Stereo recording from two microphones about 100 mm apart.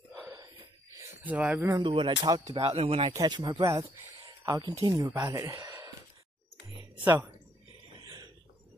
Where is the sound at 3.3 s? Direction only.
45° right (ahead or behind).